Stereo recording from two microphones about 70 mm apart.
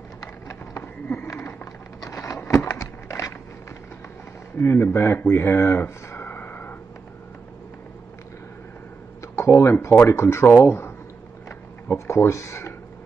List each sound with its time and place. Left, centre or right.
1.3 s a sound: left
4.6 s speech: left
9.3 s speech: left
11.9 s speech: left